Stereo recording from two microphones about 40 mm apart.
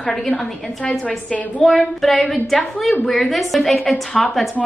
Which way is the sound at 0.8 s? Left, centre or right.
Left.